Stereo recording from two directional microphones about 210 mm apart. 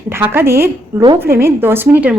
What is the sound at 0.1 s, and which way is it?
A woman's voice, 10° right (ahead or behind).